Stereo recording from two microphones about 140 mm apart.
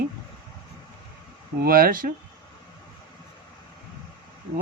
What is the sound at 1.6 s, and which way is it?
Speech, 90° right.